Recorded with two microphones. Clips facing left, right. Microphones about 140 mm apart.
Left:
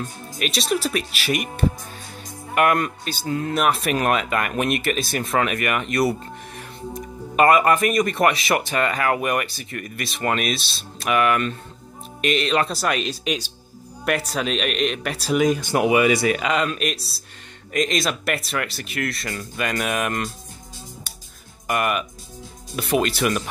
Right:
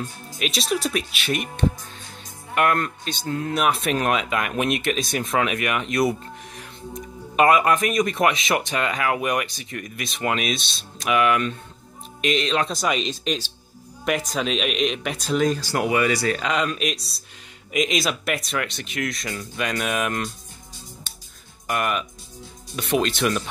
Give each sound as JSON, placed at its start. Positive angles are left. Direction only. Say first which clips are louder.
{"t": 0.4, "sound": "speech", "louder": "left 1 dB", "side_deg": 0}
{"t": 15.6, "sound": "speech", "louder": "left 4 dB", "side_deg": 20}
{"t": 16.3, "sound": "speech", "louder": "left 2 dB", "side_deg": 5}
{"t": 21.6, "sound": "speech", "louder": "left 2 dB", "side_deg": 5}